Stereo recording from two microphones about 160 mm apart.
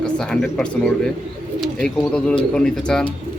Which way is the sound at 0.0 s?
5° left (ahead or behind).